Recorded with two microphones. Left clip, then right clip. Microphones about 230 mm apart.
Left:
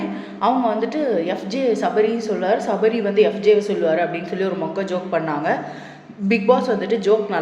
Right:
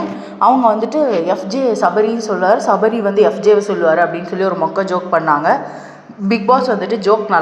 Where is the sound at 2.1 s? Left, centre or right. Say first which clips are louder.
Right 6 dB; centre.